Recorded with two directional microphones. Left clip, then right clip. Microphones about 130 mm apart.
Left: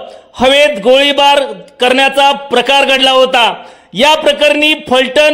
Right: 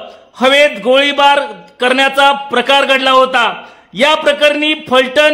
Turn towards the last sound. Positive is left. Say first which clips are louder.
# left 1 dB
turn(degrees=15)  # may be behind; listen again after turning